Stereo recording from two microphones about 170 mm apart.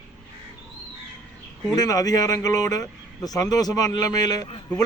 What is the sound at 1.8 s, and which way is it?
Speech, 20° left (ahead or behind).